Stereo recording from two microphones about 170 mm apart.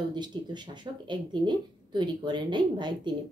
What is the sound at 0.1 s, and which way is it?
Speech, 25° right (ahead or behind).